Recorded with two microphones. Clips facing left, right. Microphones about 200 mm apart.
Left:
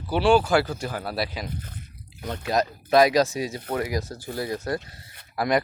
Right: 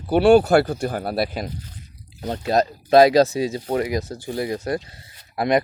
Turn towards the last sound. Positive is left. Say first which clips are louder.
# right 4 dB
turn(degrees=-25)  # may be behind; listen again after turning